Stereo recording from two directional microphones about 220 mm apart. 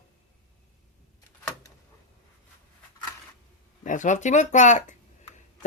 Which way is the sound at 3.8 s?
35° left (ahead or behind).